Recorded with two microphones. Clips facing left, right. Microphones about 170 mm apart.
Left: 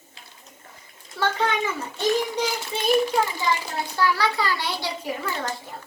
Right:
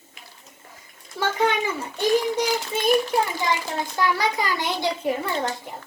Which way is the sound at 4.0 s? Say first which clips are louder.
Left 1 dB; 20° right (ahead or behind).